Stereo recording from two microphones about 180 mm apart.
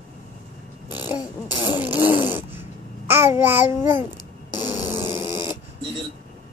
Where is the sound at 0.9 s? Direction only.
20° left (ahead or behind).